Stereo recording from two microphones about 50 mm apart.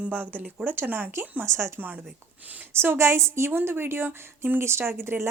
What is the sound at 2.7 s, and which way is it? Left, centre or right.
Speech, right.